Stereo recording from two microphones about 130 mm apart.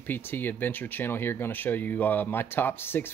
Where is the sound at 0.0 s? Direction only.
15° left (ahead or behind).